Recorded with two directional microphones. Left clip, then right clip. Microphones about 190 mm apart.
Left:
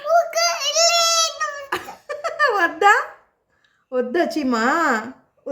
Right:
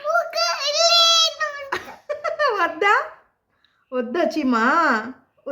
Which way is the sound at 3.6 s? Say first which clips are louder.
Left 3 dB; 20° left (ahead or behind).